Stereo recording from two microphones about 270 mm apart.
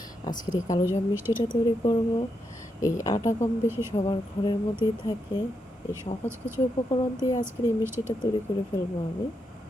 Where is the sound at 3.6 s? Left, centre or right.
Centre.